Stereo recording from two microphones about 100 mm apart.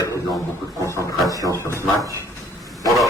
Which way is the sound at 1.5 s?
25° right (ahead or behind).